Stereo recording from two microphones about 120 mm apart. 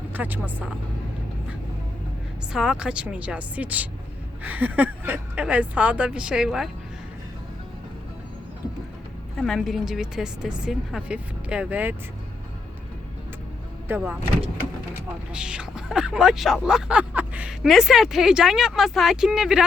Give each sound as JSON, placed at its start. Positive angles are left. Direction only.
{"t": 0.1, "sound": "speech", "side_deg": -15}
{"t": 2.5, "sound": "speech", "side_deg": -5}
{"t": 9.4, "sound": "a woman's voice", "side_deg": 0}
{"t": 13.8, "sound": "speech", "side_deg": -15}
{"t": 15.3, "sound": "a woman's voice", "side_deg": -5}